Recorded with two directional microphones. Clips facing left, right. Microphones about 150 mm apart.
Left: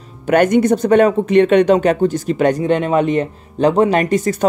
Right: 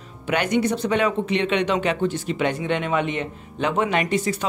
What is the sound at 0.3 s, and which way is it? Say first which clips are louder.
Speech: left 9 dB; 50° left (ahead or behind).